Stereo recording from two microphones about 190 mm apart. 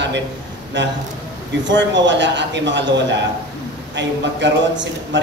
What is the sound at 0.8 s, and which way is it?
A man's voice, 70° right (ahead or behind).